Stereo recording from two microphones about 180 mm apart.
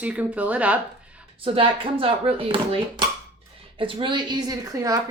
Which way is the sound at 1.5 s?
30° right (ahead or behind).